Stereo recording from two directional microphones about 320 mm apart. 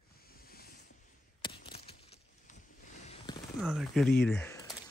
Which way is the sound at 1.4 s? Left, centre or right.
Centre.